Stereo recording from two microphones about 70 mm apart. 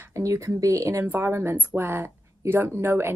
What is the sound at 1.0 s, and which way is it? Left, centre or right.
A woman's voice, right.